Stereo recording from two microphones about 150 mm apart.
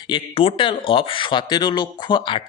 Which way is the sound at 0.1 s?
35° left (ahead or behind).